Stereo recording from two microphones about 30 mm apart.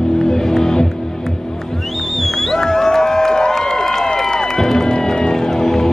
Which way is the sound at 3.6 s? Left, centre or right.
Centre.